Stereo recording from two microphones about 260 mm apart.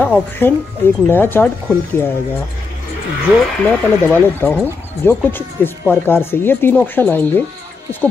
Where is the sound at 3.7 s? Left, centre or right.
Centre.